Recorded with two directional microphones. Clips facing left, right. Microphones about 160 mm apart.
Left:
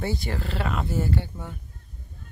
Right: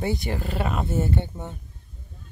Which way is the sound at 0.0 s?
20° right (ahead or behind).